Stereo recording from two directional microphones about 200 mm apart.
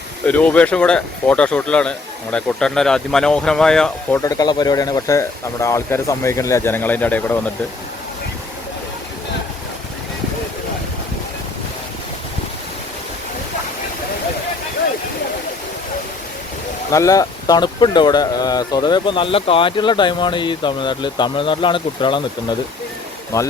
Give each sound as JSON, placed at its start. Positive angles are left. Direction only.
{"t": 0.3, "sound": "speech", "side_deg": 5}
{"t": 4.2, "sound": "speech", "side_deg": 20}
{"t": 16.9, "sound": "speech", "side_deg": 15}